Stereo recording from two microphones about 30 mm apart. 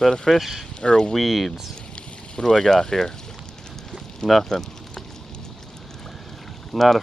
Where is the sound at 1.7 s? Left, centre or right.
Left.